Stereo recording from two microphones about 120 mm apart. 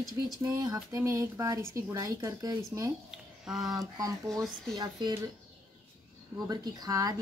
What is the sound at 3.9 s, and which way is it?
Speech, 30° right (ahead or behind).